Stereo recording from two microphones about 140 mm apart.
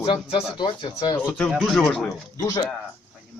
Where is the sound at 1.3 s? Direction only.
10° left (ahead or behind).